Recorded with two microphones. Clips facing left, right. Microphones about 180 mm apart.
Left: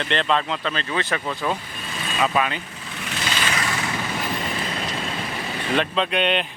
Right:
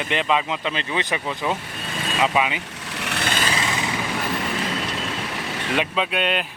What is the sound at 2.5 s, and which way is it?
Vehicle, 75° right (ahead or behind).